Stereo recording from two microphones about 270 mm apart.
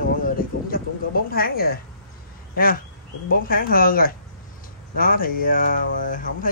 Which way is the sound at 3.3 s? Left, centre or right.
Left.